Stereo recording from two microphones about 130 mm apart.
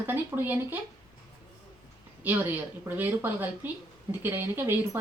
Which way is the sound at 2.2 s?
15° right (ahead or behind).